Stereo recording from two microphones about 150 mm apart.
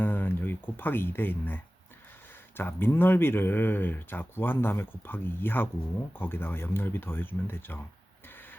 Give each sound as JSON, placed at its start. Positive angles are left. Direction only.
{"t": 0.0, "sound": "speech", "side_deg": 15}